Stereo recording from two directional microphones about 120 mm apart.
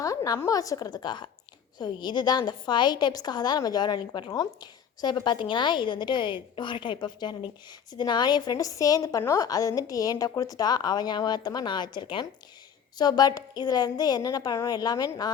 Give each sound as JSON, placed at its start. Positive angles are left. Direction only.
{"t": 0.0, "sound": "a woman's voice", "side_deg": 30}